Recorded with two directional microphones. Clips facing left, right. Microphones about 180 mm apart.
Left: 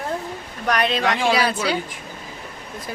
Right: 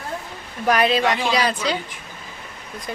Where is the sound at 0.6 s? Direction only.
5° right (ahead or behind).